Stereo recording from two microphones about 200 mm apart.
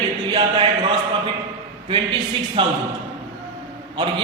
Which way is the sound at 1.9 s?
25° right (ahead or behind).